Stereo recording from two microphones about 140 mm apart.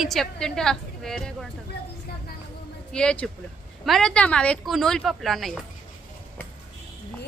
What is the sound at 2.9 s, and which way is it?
A woman's voice, 10° left (ahead or behind).